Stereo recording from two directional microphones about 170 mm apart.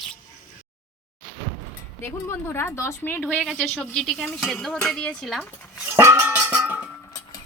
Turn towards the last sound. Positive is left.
turn(degrees=-10)  # may be behind; listen again after turning